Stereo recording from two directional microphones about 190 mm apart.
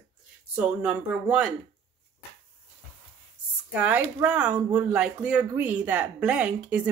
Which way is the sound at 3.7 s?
10° right (ahead or behind).